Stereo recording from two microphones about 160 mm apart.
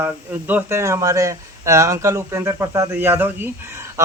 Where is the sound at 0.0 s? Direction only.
10° right (ahead or behind).